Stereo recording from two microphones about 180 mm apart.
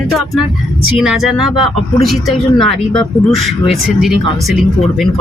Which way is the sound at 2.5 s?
25° left (ahead or behind).